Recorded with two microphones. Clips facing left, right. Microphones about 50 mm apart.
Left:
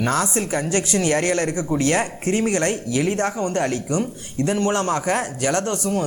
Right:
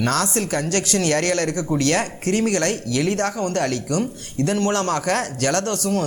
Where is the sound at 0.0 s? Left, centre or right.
Centre.